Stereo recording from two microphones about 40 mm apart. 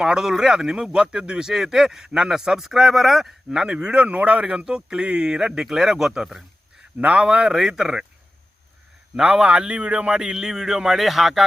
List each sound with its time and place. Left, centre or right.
0.0 s a man's voice: centre
3.7 s speech: right
4.6 s a man's voice: centre
7.0 s a man's voice: right
7.5 s a man's voice: centre
9.2 s a man's voice: right; by 11.4 s centre